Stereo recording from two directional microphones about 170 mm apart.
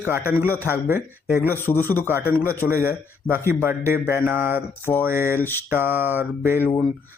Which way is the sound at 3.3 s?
15° right (ahead or behind).